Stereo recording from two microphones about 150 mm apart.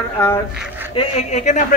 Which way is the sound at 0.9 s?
45° left (ahead or behind).